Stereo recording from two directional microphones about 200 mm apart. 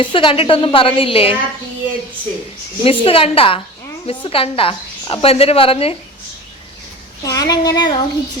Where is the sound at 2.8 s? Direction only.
30° left (ahead or behind).